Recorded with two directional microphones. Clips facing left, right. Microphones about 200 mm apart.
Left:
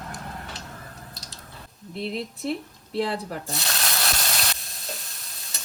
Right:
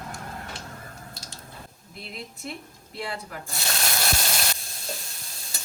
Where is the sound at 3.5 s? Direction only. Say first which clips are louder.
Even; centre (ahead or behind).